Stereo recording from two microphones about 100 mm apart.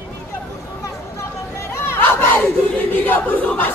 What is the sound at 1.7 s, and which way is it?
Crowd, 25° left (ahead or behind).